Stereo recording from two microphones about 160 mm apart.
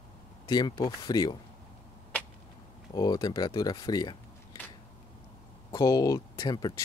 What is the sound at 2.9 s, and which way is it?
Speech, 25° left (ahead or behind).